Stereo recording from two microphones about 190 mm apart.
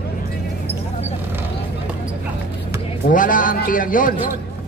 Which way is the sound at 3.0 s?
45° left (ahead or behind).